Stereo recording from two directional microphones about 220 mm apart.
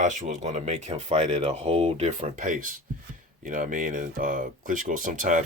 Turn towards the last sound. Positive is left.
turn(degrees=-35)  # may be behind; listen again after turning